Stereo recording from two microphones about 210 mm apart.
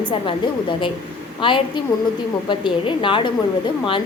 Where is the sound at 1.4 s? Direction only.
25° left (ahead or behind).